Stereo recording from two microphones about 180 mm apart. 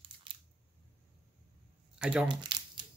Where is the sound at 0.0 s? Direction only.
25° right (ahead or behind).